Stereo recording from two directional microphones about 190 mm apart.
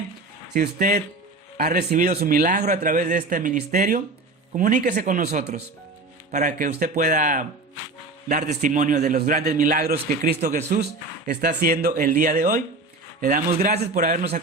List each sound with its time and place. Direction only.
0.5 s a man's voice: 45° right (ahead or behind)
8.6 s a man's voice: 40° right (ahead or behind)